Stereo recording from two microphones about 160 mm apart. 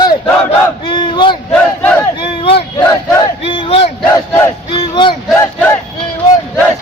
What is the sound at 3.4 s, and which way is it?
Battle cry, 30° left (ahead or behind).